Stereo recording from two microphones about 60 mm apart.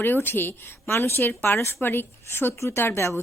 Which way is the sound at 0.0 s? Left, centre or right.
Left.